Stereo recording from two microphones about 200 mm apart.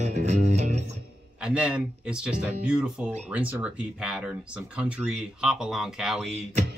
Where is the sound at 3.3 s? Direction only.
5° right (ahead or behind).